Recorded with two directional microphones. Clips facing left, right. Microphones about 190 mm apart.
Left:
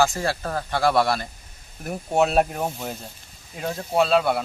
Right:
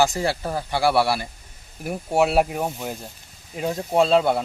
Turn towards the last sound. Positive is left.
turn(degrees=-25)  # may be behind; listen again after turning